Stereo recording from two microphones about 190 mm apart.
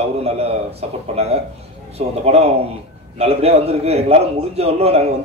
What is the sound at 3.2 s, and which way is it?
Speech, 30° right (ahead or behind).